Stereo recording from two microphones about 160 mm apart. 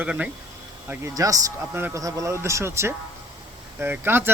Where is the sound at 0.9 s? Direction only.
20° right (ahead or behind).